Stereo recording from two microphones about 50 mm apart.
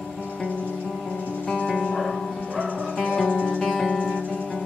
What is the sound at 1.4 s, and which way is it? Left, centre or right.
Music, centre.